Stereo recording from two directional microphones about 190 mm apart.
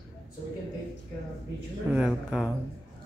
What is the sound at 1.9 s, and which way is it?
Speech, 5° right (ahead or behind).